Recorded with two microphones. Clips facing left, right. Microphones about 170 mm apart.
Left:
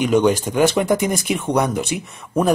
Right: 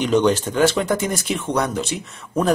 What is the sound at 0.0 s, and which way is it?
Speech, 10° left (ahead or behind).